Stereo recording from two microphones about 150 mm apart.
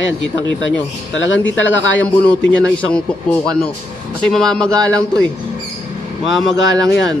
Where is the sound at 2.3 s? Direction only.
5° left (ahead or behind).